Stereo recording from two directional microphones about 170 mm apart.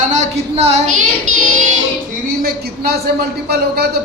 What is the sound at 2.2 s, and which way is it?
A man's voice, 65° right (ahead or behind).